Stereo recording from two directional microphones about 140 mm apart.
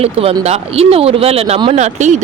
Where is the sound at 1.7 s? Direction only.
55° right (ahead or behind).